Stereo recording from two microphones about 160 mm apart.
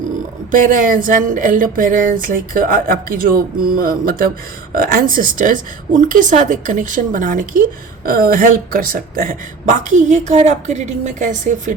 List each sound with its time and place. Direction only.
0.5 s a woman's voice: 55° right (ahead or behind)